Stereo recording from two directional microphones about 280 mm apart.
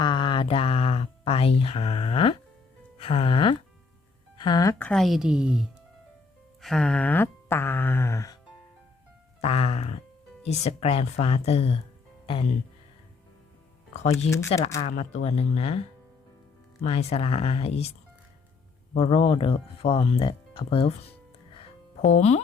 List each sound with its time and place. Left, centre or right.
0.0 s a sound: centre
3.0 s speech: centre
9.4 s speech: left
13.9 s speech: left
16.8 s speech: left
18.9 s speech: centre
22.1 s speech: left